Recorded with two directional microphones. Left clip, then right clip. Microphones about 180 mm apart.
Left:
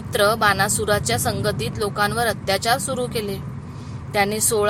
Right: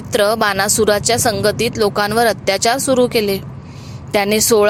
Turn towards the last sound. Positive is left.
turn(degrees=-40)  # may be behind; listen again after turning